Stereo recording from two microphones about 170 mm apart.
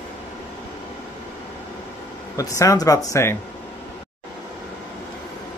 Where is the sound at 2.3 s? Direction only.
20° left (ahead or behind).